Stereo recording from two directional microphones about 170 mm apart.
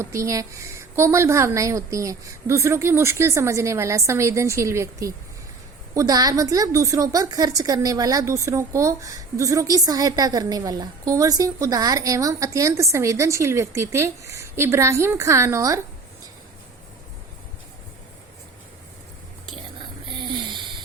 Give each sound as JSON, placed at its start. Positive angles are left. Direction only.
{"t": 0.0, "sound": "a woman's voice", "side_deg": -15}
{"t": 20.1, "sound": "snoring", "side_deg": -30}